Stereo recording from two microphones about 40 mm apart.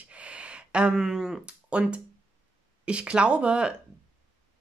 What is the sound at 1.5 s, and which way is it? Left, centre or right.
Speech, right.